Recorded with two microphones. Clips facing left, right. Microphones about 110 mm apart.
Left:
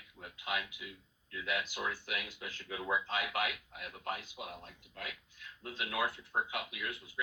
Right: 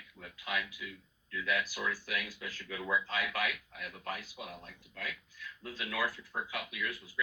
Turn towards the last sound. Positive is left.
turn(degrees=25)  # may be behind; listen again after turning